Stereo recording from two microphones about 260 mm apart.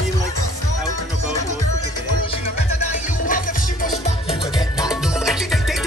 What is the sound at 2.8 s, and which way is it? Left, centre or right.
Music, left.